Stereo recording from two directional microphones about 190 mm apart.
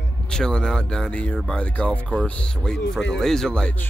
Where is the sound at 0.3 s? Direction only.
5° left (ahead or behind).